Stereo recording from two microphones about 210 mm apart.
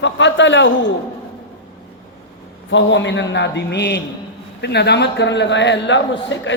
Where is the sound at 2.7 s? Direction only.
60° left (ahead or behind).